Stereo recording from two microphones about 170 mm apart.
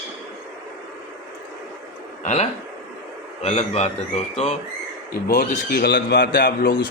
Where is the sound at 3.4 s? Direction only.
40° left (ahead or behind).